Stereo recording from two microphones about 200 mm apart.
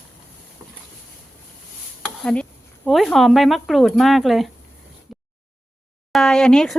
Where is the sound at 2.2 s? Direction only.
5° left (ahead or behind).